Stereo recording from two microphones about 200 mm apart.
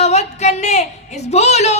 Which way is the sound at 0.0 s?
35° left (ahead or behind).